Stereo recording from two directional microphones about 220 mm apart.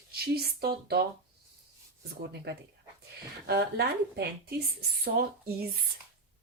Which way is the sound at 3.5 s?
45° right (ahead or behind).